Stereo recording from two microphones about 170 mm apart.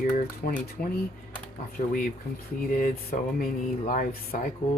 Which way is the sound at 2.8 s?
50° left (ahead or behind).